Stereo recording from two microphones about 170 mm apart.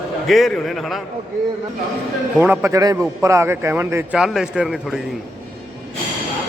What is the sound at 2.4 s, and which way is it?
A man's voice, 10° right (ahead or behind).